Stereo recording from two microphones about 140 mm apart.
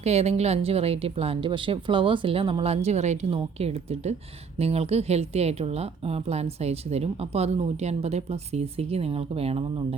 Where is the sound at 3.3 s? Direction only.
45° right (ahead or behind).